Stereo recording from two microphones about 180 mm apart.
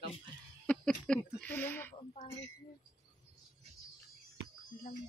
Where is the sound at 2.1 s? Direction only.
35° left (ahead or behind).